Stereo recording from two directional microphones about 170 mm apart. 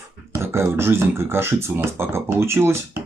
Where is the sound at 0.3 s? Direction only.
15° right (ahead or behind).